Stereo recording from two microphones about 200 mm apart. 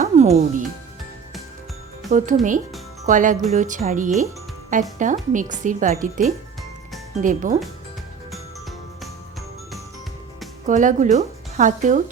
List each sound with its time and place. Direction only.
0.0 s music: 35° right (ahead or behind)
2.0 s speech: 40° right (ahead or behind)
10.7 s speech: 40° right (ahead or behind)